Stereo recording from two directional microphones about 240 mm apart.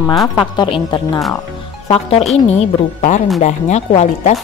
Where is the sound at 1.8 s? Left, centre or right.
Left.